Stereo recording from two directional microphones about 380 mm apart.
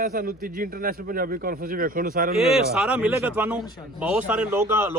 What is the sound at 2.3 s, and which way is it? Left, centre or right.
A man's voice, centre.